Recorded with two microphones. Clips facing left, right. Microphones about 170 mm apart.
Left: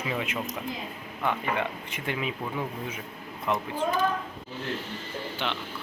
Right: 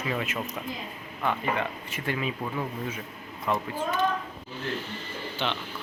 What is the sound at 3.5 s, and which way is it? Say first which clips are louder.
Speech: even; 15° left (ahead or behind).